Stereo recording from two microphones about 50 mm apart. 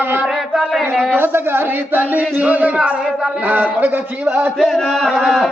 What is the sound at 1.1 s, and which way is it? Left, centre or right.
Speech, right.